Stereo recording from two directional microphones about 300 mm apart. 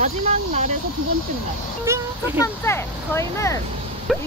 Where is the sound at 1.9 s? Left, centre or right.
Centre.